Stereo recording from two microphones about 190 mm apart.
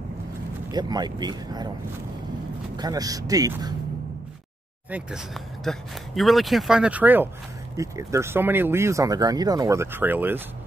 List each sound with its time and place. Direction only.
0.7 s speech: 20° right (ahead or behind)
2.8 s speech: 20° right (ahead or behind)
4.9 s speech: centre (ahead or behind)